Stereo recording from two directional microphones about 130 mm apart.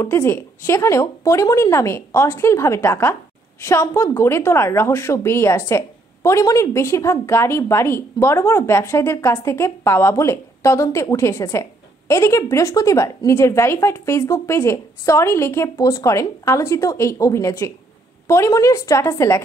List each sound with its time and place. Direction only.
0.0 s a woman's voice: 20° left (ahead or behind)